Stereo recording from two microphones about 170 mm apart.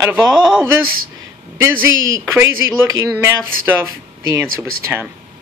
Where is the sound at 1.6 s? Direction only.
15° right (ahead or behind).